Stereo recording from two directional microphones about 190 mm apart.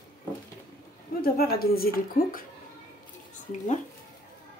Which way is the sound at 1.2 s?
50° left (ahead or behind).